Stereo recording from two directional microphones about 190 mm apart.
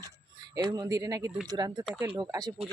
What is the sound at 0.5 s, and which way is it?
Speech, 20° right (ahead or behind).